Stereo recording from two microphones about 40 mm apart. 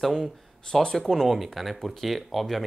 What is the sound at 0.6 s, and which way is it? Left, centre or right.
Speech, centre.